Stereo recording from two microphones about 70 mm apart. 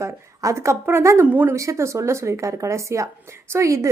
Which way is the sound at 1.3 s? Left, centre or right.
Right.